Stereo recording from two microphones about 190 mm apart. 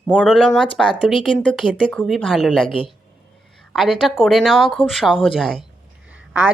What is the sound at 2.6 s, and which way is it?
Speech, 25° left (ahead or behind).